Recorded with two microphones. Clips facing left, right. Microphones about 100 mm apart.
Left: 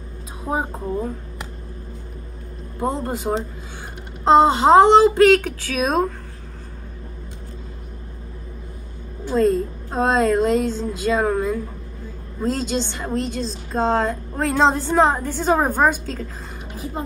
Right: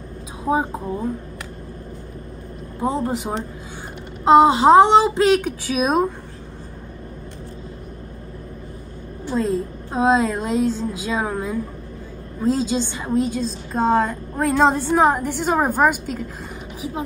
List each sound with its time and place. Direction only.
0.5 s a woman's voice: 15° right (ahead or behind)
2.9 s a woman's voice: 15° right (ahead or behind)
5.2 s a woman's voice: 15° right (ahead or behind)
9.3 s a woman's voice: centre (ahead or behind)